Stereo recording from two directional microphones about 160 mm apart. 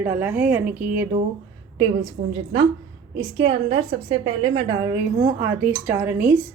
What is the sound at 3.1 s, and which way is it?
A woman's voice, 35° right (ahead or behind).